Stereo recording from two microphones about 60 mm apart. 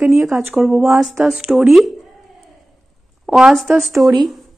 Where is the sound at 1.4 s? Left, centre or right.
Centre.